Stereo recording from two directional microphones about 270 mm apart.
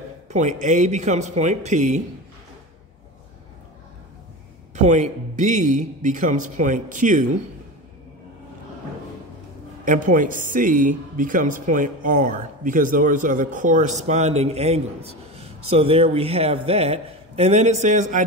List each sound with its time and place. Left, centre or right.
0.3 s speech: right
4.7 s speech: right
9.8 s speech: right